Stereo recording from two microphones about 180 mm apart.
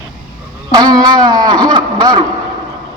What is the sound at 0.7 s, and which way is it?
Speech, 20° right (ahead or behind).